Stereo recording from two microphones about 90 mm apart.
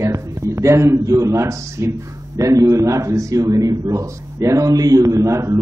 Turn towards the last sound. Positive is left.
turn(degrees=-35)  # may be behind; listen again after turning